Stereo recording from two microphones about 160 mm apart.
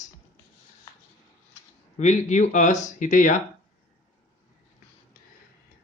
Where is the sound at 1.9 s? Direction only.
50° left (ahead or behind).